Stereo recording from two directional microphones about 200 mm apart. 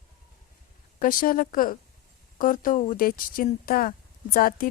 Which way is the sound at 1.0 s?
45° left (ahead or behind).